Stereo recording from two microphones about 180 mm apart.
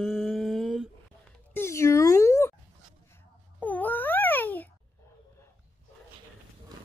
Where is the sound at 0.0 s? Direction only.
Centre (ahead or behind).